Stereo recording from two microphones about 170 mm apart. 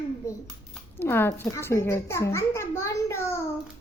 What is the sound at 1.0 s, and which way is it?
A child's voice, 10° left (ahead or behind).